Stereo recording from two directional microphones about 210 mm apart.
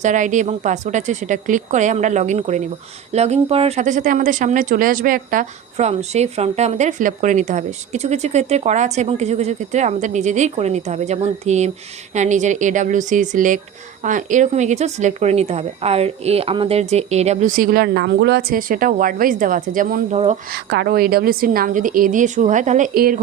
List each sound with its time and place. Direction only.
0.0 s speech: 35° right (ahead or behind)
20.5 s a woman's voice: 50° right (ahead or behind)